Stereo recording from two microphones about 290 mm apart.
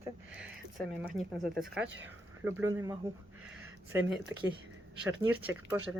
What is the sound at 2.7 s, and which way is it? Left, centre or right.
Speech, centre.